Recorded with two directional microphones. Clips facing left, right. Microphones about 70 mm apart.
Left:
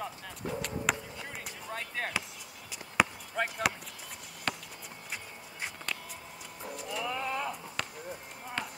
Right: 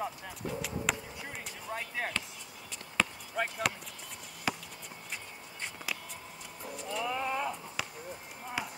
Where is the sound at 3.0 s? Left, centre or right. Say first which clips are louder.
Left 4 dB; centre.